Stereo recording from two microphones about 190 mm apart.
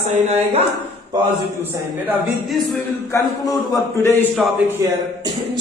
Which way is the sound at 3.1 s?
20° left (ahead or behind).